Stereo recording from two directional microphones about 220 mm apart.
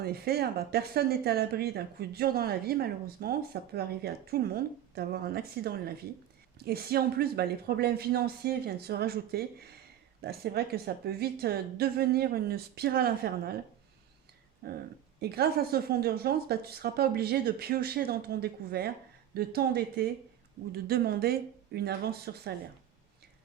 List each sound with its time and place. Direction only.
0.0 s speech: 45° right (ahead or behind)
14.6 s speech: 45° right (ahead or behind)